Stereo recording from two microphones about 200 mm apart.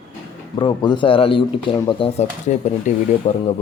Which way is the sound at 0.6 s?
20° left (ahead or behind).